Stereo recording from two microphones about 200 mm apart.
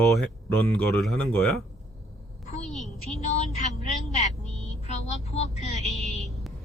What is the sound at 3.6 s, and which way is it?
Speech, 35° left (ahead or behind).